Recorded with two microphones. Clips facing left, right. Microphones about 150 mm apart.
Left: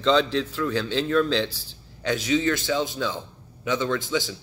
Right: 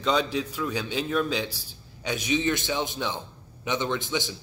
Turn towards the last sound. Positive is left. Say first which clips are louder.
# left 3 dB
turn(degrees=-20)  # may be behind; listen again after turning